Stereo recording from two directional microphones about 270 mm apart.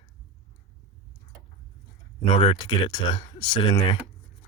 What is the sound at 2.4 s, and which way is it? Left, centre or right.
Speech, centre.